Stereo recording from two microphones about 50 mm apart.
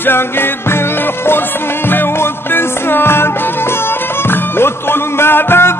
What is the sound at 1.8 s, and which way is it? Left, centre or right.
Music, left.